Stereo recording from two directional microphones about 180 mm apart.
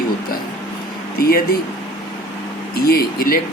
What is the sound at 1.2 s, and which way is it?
Speech, 55° left (ahead or behind).